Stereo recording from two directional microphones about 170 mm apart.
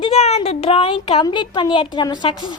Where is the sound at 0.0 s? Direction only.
35° left (ahead or behind).